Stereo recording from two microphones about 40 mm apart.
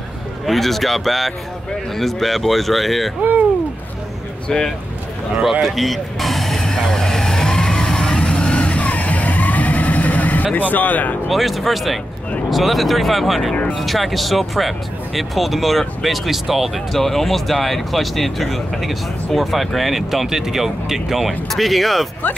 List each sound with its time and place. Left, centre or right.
0.5 s speech: centre
3.2 s speech: right
4.5 s speech: centre
5.4 s speech: centre
5.7 s vehicle: centre; by 11.1 s left
11.2 s speech: centre
21.3 s speech: centre